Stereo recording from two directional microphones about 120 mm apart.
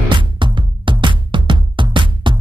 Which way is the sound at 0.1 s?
40° right (ahead or behind).